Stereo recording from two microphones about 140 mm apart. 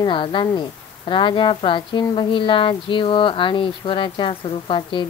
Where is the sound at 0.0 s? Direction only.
35° left (ahead or behind).